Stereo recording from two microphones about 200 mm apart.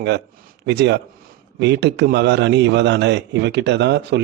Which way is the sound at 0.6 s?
60° right (ahead or behind).